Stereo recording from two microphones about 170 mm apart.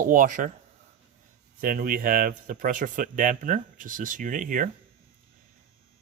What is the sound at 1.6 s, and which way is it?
Speech, 55° right (ahead or behind).